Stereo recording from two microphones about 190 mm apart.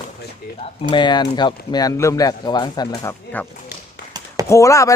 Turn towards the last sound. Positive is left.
turn(degrees=15)  # may be behind; listen again after turning